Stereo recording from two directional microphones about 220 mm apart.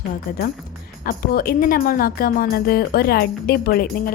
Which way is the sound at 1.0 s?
45° left (ahead or behind).